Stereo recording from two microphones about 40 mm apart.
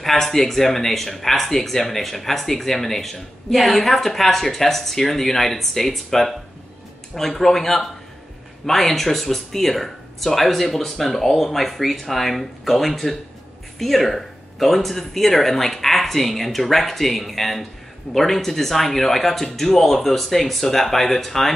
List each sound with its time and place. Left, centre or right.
0.0 s speech: centre